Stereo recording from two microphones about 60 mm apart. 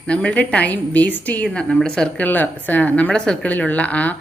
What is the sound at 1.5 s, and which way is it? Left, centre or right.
Speech, centre.